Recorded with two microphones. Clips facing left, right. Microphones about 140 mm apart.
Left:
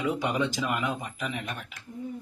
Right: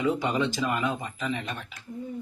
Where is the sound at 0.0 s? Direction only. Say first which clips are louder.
Right 2 dB; 15° left (ahead or behind).